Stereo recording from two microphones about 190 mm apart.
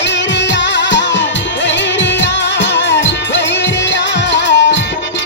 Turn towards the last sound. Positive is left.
turn(degrees=70)  # may be behind; listen again after turning